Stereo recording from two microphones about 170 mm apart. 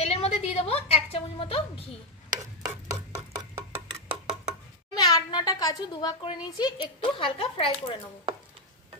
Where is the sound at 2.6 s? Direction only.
15° right (ahead or behind).